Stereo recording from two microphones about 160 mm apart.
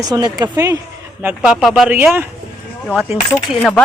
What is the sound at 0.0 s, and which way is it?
Speech, 25° right (ahead or behind).